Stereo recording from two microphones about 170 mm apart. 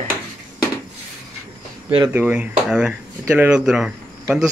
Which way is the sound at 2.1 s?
10° right (ahead or behind).